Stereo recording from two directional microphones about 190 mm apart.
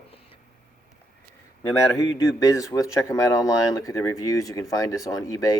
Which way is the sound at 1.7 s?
15° left (ahead or behind).